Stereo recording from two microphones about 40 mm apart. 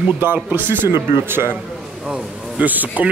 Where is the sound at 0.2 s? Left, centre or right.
Right.